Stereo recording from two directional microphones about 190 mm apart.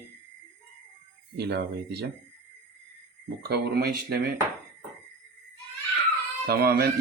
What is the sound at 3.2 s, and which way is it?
Speech, 55° right (ahead or behind).